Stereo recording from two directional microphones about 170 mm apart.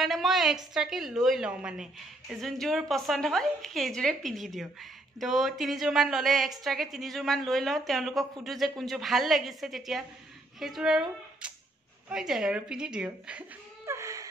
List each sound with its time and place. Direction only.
0.0 s a woman's voice: centre (ahead or behind); by 14.3 s 20° right (ahead or behind)